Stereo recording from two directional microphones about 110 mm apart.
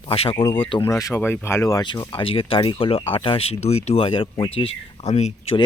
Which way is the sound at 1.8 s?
45° left (ahead or behind).